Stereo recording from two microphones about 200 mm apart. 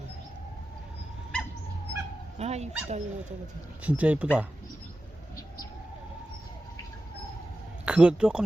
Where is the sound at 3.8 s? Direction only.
5° right (ahead or behind).